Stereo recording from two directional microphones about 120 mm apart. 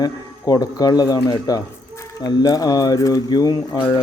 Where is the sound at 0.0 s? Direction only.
30° left (ahead or behind).